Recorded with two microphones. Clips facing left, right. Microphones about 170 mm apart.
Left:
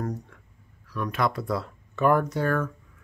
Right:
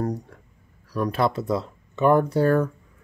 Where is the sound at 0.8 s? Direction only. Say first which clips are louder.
Right 4 dB; 35° right (ahead or behind).